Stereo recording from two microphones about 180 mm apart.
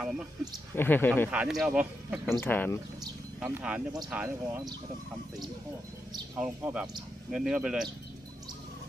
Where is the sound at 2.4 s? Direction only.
10° left (ahead or behind).